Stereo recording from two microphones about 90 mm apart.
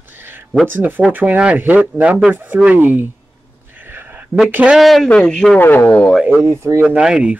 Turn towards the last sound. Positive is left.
turn(degrees=-10)  # may be behind; listen again after turning